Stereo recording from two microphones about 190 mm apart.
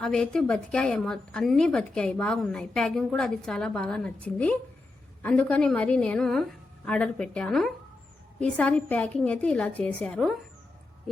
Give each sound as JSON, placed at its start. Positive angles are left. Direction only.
{"t": 0.0, "sound": "a woman's voice", "side_deg": 5}